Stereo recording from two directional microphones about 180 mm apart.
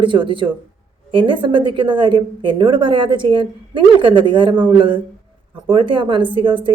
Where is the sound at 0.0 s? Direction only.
25° right (ahead or behind).